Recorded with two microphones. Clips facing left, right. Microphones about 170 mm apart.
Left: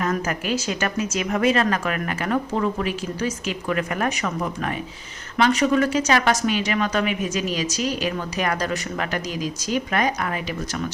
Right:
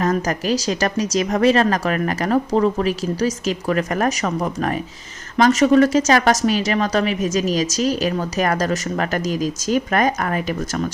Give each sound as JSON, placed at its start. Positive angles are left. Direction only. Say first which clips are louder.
{"t": 0.0, "sound": "a woman's voice", "louder": "right 4 dB", "side_deg": -40}